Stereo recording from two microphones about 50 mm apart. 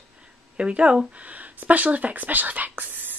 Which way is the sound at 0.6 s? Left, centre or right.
Right.